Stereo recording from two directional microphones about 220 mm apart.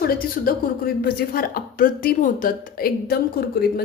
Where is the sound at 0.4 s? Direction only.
40° left (ahead or behind).